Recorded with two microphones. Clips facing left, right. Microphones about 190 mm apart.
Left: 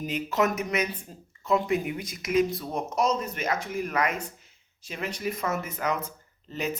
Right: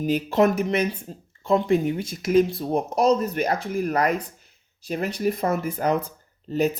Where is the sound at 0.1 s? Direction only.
30° right (ahead or behind).